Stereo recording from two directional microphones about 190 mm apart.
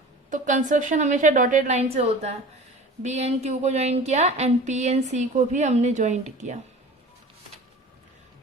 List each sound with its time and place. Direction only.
0.3 s speech: 40° right (ahead or behind)